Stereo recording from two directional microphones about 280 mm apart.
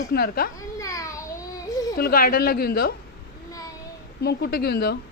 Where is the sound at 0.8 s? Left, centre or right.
Centre.